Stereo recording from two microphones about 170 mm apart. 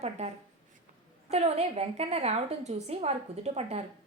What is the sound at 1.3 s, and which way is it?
A woman's voice, 40° right (ahead or behind).